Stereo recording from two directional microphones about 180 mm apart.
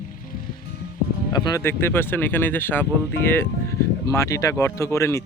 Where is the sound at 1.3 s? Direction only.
20° left (ahead or behind).